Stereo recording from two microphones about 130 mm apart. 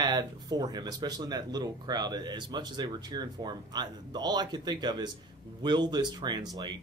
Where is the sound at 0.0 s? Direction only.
35° right (ahead or behind).